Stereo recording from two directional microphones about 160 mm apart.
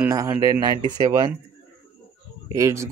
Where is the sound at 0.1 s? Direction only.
20° right (ahead or behind).